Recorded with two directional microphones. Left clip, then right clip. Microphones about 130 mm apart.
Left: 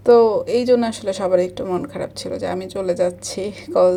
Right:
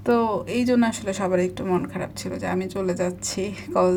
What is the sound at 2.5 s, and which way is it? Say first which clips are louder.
Speech: left 2 dB; 20° left (ahead or behind).